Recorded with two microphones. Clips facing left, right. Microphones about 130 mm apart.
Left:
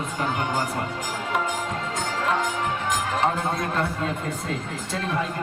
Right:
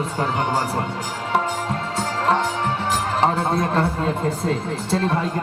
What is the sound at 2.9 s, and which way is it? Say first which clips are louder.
A man's voice: right 4 dB; 30° right (ahead or behind).